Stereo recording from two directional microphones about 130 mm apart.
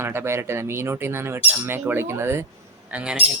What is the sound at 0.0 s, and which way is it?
Squawk, 20° right (ahead or behind).